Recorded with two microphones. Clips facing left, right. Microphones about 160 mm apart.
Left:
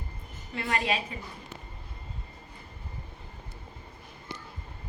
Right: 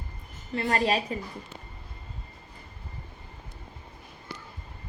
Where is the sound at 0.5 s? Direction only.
40° right (ahead or behind).